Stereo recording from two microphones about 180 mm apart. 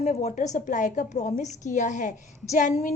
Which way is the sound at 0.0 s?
40° left (ahead or behind).